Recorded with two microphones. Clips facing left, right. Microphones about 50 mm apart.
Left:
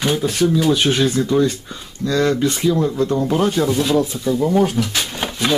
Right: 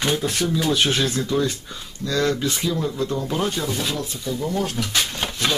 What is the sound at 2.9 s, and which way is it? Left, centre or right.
Speech, left.